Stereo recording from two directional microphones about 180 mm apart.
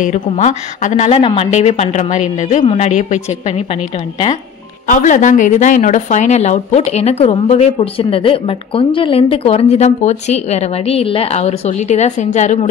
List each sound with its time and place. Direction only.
0.0 s a woman's voice: 40° left (ahead or behind)
4.8 s a woman's voice: 45° left (ahead or behind)